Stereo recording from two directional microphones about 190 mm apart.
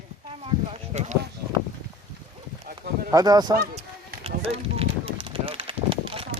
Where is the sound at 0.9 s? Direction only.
35° right (ahead or behind).